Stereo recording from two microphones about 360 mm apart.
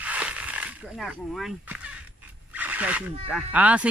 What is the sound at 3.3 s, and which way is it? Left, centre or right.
Speech, centre.